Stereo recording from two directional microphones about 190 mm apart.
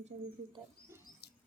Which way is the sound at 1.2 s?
60° left (ahead or behind).